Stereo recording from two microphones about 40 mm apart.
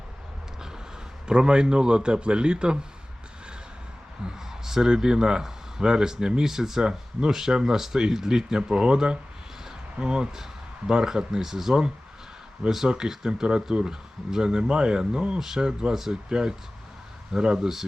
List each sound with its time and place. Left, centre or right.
1.3 s speech: right
4.3 s speech: centre
12.9 s speech: centre
15.4 s speech: centre